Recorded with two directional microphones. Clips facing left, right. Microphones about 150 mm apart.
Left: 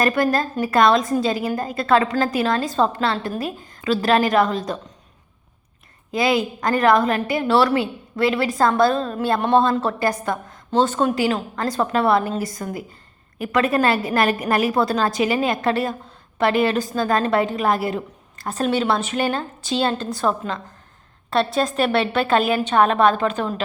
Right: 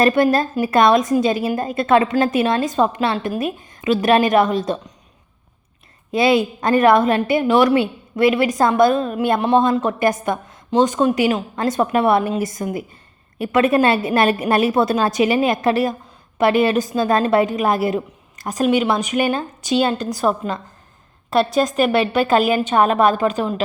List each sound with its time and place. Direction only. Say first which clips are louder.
0.0 s a woman's voice: right 4 dB; 20° right (ahead or behind)
6.1 s a woman's voice: right 4 dB; 25° right (ahead or behind); by 9.6 s 5° right (ahead or behind)
9.7 s a woman's voice: right 3 dB; 20° right (ahead or behind)
21.8 s a woman's voice: right 2 dB; centre (ahead or behind)